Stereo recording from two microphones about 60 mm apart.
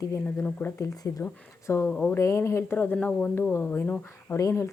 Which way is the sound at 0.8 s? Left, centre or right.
Left.